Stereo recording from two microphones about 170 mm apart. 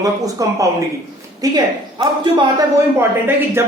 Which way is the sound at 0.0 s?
20° right (ahead or behind).